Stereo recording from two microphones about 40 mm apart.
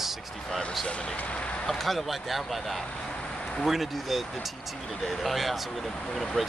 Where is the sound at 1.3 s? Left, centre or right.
Left.